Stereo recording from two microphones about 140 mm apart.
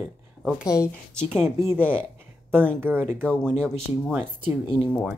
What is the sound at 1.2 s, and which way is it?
A woman's voice, 20° right (ahead or behind).